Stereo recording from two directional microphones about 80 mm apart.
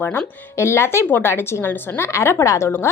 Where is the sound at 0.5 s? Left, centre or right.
Left.